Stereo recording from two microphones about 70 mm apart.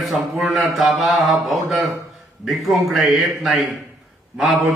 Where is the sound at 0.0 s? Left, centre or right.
Centre.